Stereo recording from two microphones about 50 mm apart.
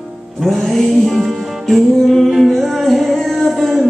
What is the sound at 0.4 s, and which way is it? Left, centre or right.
Music, centre.